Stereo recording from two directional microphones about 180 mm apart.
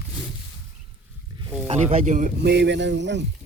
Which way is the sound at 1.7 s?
35° right (ahead or behind).